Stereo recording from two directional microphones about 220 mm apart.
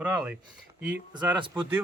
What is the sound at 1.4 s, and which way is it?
Speech, 20° right (ahead or behind).